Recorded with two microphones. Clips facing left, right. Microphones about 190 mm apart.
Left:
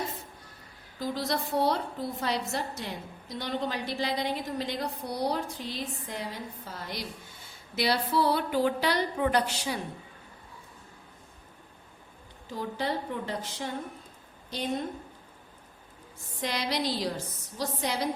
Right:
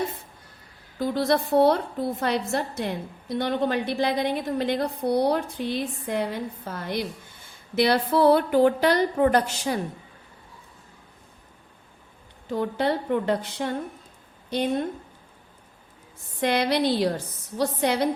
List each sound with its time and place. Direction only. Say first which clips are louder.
0.9 s a woman's voice: right 8 dB; 60° right (ahead or behind)
12.5 s a woman's voice: right 7 dB; 60° right (ahead or behind)
16.4 s a woman's voice: right 8 dB; 60° right (ahead or behind)